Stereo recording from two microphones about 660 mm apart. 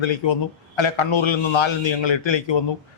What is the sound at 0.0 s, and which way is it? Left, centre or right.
A man's voice, left.